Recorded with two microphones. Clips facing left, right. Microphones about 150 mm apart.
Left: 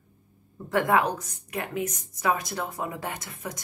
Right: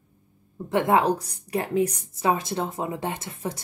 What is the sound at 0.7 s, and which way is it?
A woman's voice, 25° right (ahead or behind).